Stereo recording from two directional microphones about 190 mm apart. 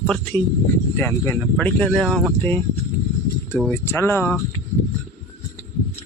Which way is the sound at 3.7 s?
15° left (ahead or behind).